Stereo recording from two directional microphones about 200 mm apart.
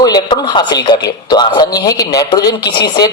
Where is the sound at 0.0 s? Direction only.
20° left (ahead or behind).